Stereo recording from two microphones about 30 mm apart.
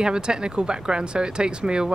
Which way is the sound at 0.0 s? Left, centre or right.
Right.